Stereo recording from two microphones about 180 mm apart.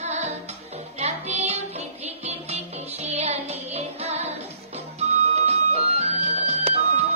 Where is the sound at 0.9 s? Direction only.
35° right (ahead or behind).